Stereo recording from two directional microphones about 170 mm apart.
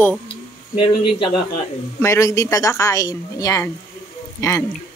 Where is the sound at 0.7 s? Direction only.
30° left (ahead or behind).